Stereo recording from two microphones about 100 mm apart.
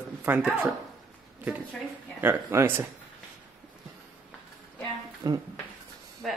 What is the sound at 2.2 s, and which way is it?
Speech, 25° right (ahead or behind).